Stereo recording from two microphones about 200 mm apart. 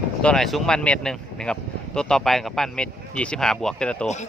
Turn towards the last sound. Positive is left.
turn(degrees=5)  # may be behind; listen again after turning